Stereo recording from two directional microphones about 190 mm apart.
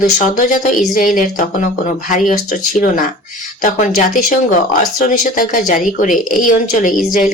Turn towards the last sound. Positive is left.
turn(degrees=45)  # may be behind; listen again after turning